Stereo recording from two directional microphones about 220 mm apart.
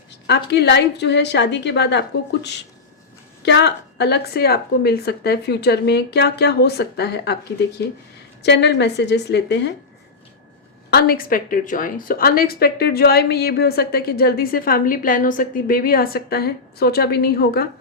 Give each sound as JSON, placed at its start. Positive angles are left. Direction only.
{"t": 0.3, "sound": "a woman's voice", "side_deg": 50}
{"t": 8.4, "sound": "a woman's voice", "side_deg": 50}
{"t": 10.9, "sound": "a woman's voice", "side_deg": 45}